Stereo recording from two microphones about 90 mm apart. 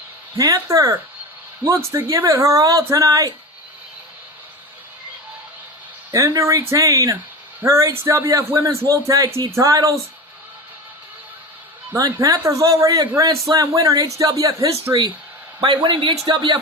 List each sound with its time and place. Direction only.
0.3 s speech: 40° right (ahead or behind)
6.1 s speech: 35° right (ahead or behind)
12.4 s speech: 35° right (ahead or behind)
15.6 s speech: 65° right (ahead or behind)